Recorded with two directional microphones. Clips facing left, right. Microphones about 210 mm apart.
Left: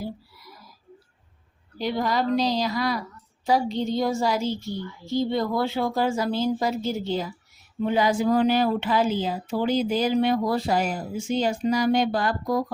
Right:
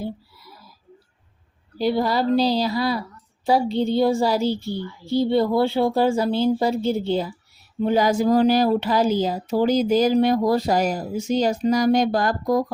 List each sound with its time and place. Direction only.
1.8 s speech: 35° right (ahead or behind)
7.9 s speech: 40° right (ahead or behind)